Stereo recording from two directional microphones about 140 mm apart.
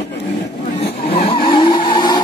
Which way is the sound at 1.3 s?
40° left (ahead or behind).